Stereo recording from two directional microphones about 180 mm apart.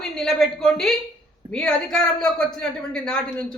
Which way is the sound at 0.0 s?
Centre (ahead or behind).